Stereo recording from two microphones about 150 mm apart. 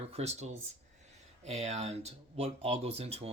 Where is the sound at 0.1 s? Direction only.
45° right (ahead or behind).